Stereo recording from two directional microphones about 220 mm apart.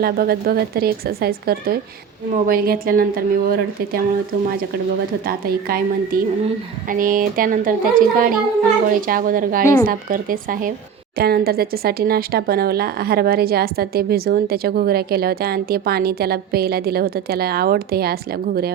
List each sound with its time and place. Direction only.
0.0 s a woman's voice: 45° right (ahead or behind)
5.2 s a woman's voice: 40° right (ahead or behind)